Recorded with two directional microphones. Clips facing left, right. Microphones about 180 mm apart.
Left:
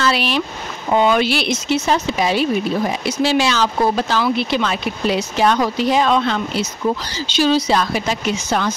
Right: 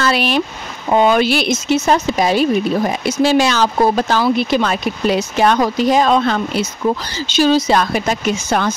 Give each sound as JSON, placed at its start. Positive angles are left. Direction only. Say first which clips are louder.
{"t": 0.0, "sound": "speech", "louder": "right 2 dB", "side_deg": -50}